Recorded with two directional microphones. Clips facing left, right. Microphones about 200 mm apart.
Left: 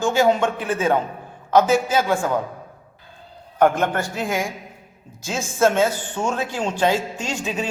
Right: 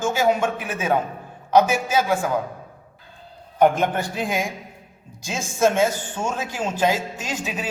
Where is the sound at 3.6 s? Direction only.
15° right (ahead or behind).